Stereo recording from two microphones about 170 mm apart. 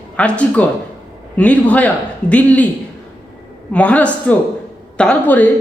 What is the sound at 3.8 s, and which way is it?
Speech, 10° left (ahead or behind).